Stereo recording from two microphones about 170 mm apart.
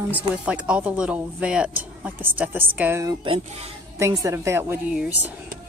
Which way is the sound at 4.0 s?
20° right (ahead or behind).